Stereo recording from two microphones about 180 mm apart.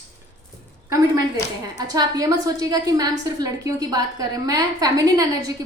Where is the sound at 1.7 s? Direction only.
20° right (ahead or behind).